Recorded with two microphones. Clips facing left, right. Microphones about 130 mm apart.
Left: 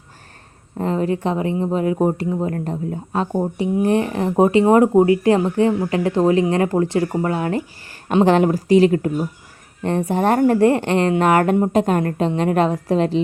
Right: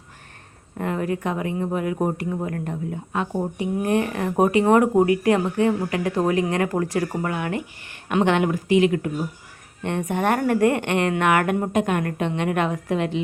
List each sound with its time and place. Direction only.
0.8 s speech: 30° left (ahead or behind)